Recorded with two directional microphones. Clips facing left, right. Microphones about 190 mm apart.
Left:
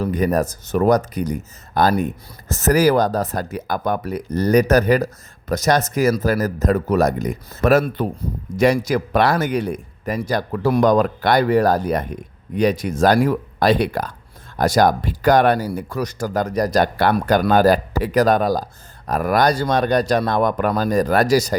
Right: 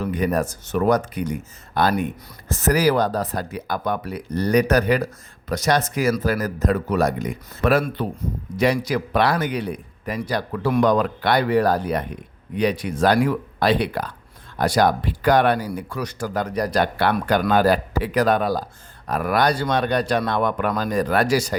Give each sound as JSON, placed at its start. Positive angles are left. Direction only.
{"t": 0.0, "sound": "speech", "side_deg": 40}